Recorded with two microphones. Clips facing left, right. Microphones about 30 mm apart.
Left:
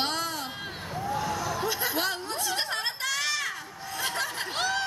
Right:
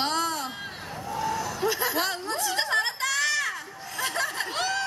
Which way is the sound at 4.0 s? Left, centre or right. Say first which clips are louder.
Right 3 dB; centre.